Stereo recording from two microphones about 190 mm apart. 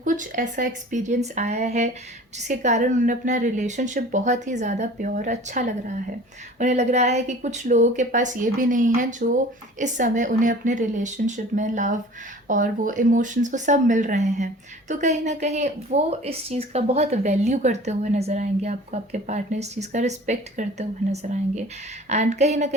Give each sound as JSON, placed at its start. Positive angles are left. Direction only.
{"t": 0.0, "sound": "speech", "side_deg": -45}